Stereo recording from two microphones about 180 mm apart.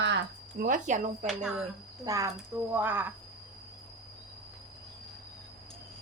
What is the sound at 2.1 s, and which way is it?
A woman's voice, 20° right (ahead or behind).